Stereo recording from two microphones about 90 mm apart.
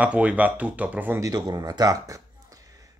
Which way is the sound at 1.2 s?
45° right (ahead or behind).